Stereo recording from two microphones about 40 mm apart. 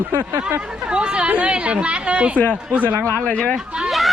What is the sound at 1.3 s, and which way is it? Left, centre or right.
Speech, right.